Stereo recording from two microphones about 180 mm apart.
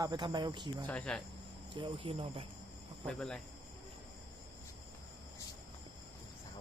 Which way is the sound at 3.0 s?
5° left (ahead or behind).